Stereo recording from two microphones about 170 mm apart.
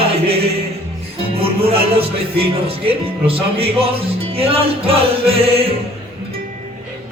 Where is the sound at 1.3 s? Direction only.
35° right (ahead or behind).